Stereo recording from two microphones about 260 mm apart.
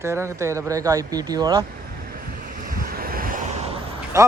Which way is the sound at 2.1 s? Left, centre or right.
Right.